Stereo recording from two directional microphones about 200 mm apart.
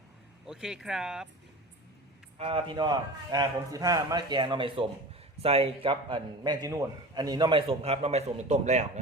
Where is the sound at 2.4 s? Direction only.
25° right (ahead or behind).